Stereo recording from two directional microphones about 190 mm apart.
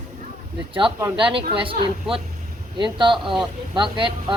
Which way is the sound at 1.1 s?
25° right (ahead or behind).